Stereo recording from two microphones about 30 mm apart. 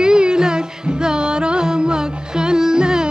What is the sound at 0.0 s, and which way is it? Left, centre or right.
Music, right.